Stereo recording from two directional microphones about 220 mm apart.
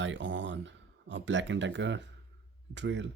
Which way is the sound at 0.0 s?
55° right (ahead or behind).